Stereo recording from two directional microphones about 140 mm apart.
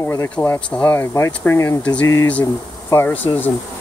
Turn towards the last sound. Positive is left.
turn(degrees=15)  # may be behind; listen again after turning